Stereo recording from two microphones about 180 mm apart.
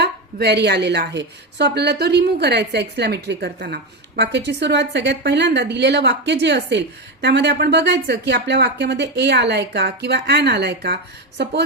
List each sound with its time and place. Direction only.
0.0 s a woman's voice: 65° right (ahead or behind)